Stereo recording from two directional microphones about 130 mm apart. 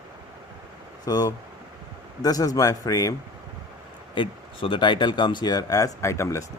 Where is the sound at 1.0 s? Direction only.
30° left (ahead or behind).